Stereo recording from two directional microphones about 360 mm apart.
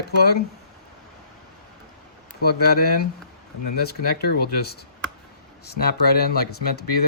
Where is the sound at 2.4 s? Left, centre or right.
Left.